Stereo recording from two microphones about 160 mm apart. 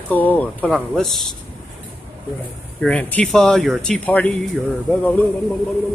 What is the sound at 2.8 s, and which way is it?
Speech, 10° left (ahead or behind).